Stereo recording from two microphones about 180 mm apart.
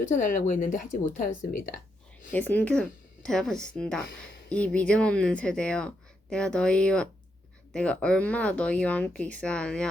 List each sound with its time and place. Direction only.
0.0 s speech: 45° left (ahead or behind)
2.3 s speech: 10° left (ahead or behind)